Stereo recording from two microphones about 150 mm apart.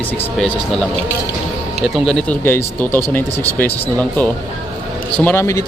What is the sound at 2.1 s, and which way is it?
Speech, 5° left (ahead or behind).